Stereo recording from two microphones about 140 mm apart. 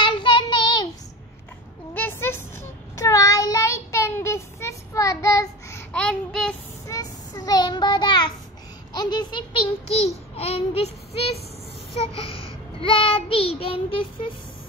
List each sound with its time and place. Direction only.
0.0 s child singing: 35° left (ahead or behind)
2.0 s child singing: 15° left (ahead or behind)
6.9 s child singing: 25° left (ahead or behind)
8.9 s a sound: 30° left (ahead or behind); by 11.3 s 45° left (ahead or behind)
12.2 s child singing: 40° left (ahead or behind)